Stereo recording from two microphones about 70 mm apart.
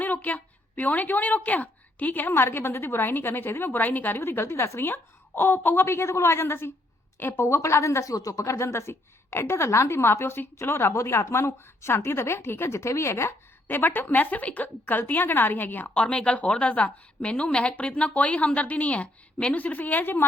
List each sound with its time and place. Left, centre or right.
0.0 s a woman's voice: left